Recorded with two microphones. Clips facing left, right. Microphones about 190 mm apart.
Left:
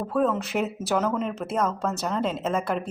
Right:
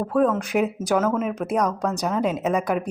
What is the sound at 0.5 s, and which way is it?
Speech, 5° right (ahead or behind).